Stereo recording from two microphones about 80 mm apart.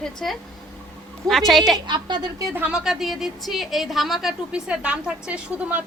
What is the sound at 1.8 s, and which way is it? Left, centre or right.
Speech, right.